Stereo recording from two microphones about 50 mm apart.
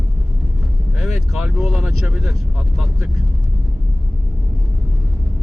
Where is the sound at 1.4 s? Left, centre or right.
Centre.